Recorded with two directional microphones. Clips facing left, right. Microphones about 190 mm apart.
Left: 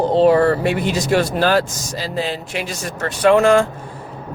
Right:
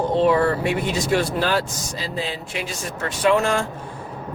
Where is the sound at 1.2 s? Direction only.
80° left.